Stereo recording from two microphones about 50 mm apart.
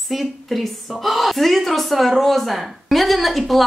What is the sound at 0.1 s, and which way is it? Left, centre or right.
A woman's voice, centre.